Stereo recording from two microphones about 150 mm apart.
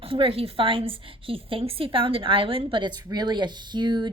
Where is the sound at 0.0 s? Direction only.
35° right (ahead or behind).